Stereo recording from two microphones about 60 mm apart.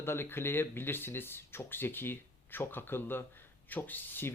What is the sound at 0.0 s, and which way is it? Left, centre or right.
Speech, left.